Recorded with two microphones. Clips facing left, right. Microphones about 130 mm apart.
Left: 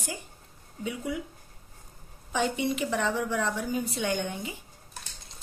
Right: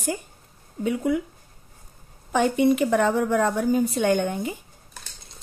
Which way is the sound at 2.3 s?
50° right (ahead or behind).